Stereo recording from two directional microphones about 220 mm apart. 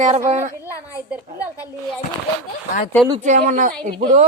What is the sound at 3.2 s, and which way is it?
Speech, 35° right (ahead or behind).